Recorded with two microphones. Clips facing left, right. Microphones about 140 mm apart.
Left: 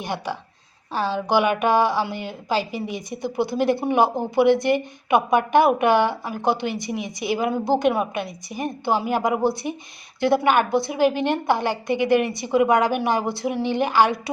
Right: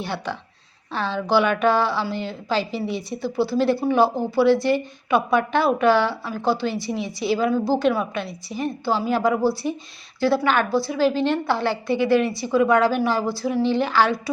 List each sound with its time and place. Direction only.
0.0 s a woman's voice: 15° left (ahead or behind)